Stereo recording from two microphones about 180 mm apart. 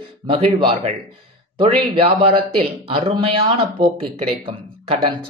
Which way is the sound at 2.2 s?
30° right (ahead or behind).